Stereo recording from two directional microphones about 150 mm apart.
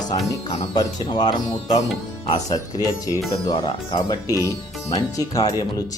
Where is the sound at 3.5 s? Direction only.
30° left (ahead or behind).